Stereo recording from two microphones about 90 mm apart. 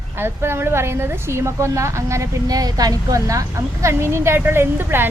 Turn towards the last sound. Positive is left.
turn(degrees=-25)  # may be behind; listen again after turning